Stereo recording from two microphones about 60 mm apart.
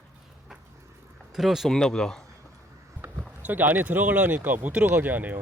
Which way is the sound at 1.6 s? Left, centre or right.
Centre.